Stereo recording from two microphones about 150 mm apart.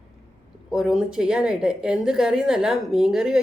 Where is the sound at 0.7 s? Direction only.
5° right (ahead or behind).